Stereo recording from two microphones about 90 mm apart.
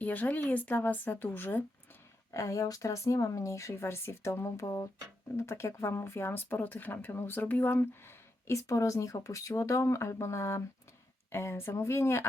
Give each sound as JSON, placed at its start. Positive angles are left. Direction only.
{"t": 0.0, "sound": "speech", "side_deg": 20}
{"t": 2.3, "sound": "speech", "side_deg": 35}